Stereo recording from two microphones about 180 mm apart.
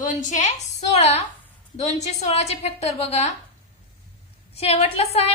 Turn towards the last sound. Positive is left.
turn(degrees=35)  # may be behind; listen again after turning